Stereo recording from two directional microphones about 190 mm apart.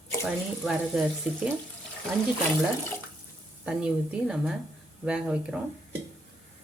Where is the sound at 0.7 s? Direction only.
Centre (ahead or behind).